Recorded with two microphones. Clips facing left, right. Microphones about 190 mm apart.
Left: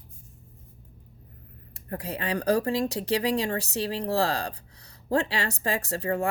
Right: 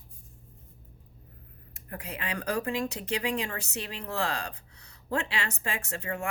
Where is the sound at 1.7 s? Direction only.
35° left (ahead or behind).